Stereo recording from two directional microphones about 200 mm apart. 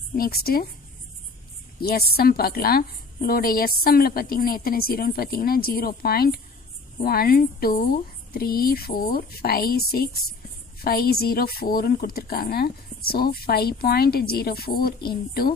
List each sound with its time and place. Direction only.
0.2 s a woman's voice: 50° left (ahead or behind)
1.8 s a woman's voice: 50° left (ahead or behind)